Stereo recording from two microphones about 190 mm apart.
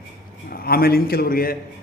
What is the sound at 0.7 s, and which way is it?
Speech, 55° left (ahead or behind).